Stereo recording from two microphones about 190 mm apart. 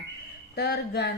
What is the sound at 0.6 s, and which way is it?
Speech, 60° left (ahead or behind).